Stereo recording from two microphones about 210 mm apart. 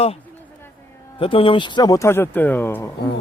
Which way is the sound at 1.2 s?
25° left (ahead or behind).